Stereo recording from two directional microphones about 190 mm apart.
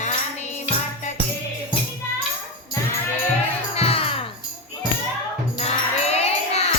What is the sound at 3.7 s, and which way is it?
Music, 30° left (ahead or behind).